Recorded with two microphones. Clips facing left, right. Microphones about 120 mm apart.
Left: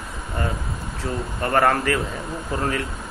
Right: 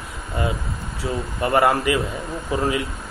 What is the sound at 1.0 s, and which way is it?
Speech, 10° right (ahead or behind).